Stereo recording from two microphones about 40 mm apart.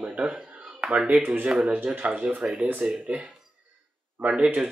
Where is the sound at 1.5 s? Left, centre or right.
Right.